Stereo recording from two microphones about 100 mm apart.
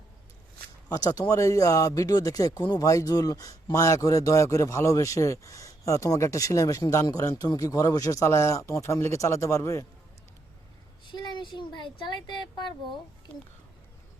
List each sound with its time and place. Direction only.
0.9 s speech: 40° left (ahead or behind)
11.1 s speech: 50° left (ahead or behind)